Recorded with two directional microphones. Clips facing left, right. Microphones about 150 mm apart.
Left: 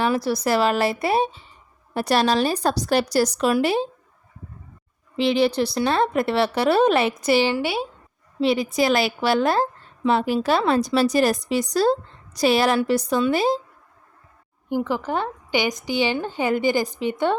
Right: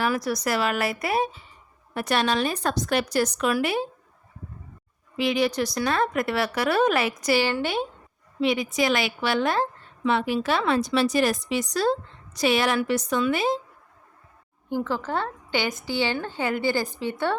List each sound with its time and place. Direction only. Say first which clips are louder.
0.0 s a woman's voice: left 4 dB; 30° left (ahead or behind)
5.1 s a woman's voice: left 4 dB; 30° left (ahead or behind); by 7.9 s 10° left (ahead or behind)
8.4 s a woman's voice: left 3 dB; 35° left (ahead or behind)
14.7 s a woman's voice: left 3 dB; 15° left (ahead or behind)